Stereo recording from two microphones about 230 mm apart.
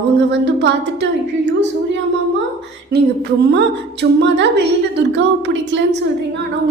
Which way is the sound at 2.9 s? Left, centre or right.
Right.